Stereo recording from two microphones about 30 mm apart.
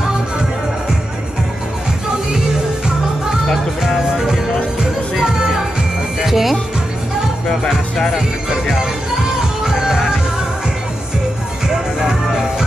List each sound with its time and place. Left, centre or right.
6.2 s music: centre
9.7 s music: centre
11.6 s music: centre